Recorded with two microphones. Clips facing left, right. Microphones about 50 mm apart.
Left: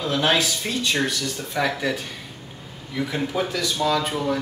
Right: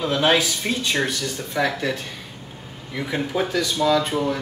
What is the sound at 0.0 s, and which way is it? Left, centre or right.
Speech, centre.